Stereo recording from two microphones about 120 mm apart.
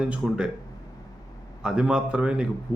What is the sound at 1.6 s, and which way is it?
Speech, 5° right (ahead or behind).